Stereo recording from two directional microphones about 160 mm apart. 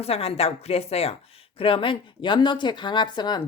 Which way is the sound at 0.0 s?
40° left (ahead or behind).